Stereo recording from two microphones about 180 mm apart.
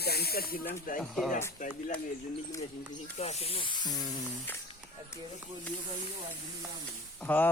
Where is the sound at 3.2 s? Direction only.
35° left (ahead or behind).